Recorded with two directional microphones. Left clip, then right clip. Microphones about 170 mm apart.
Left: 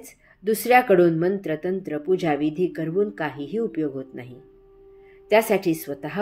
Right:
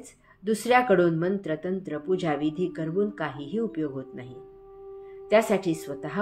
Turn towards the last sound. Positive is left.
turn(degrees=50)  # may be behind; listen again after turning